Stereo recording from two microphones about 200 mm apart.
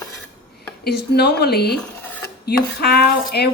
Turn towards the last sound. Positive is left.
turn(degrees=55)  # may be behind; listen again after turning